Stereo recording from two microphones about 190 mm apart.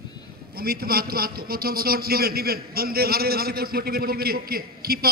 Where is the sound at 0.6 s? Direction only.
55° right (ahead or behind).